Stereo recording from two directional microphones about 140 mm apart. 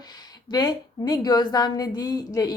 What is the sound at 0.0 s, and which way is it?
A woman's voice, 30° left (ahead or behind).